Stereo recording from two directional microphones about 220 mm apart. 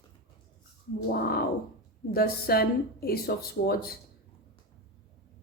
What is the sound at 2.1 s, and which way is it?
Speech, 45° left (ahead or behind).